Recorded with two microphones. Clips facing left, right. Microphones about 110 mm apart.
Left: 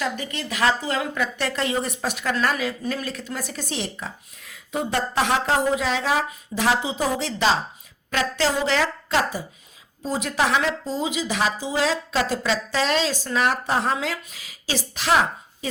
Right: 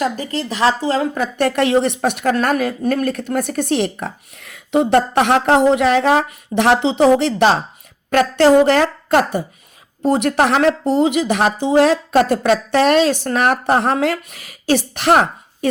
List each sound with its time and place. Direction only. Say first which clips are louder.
0.0 s a woman's voice: right 7 dB; 35° right (ahead or behind)
1.4 s a woman's voice: right 13 dB; 60° right (ahead or behind)